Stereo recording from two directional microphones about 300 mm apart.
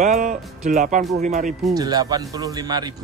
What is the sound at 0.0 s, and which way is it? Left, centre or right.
Speech, right.